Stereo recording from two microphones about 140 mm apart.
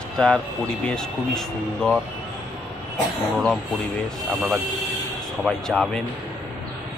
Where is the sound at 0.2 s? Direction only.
5° left (ahead or behind).